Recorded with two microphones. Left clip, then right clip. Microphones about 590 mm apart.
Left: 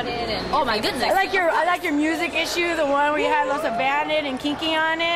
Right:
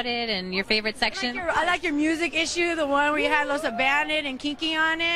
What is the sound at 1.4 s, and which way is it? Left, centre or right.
A woman's voice, centre.